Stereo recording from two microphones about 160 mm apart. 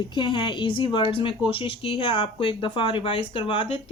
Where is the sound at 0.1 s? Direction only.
30° left (ahead or behind).